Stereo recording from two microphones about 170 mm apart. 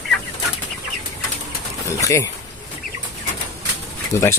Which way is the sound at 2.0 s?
20° left (ahead or behind).